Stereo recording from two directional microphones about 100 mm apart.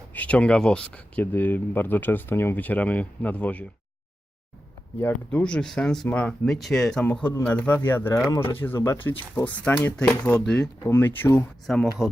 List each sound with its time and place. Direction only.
0.1 s speech: 15° left (ahead or behind)
4.9 s speech: 15° left (ahead or behind)
7.0 s speech: 15° left (ahead or behind)
9.0 s speech: 15° left (ahead or behind)
10.8 s speech: 25° left (ahead or behind)
11.6 s speech: centre (ahead or behind)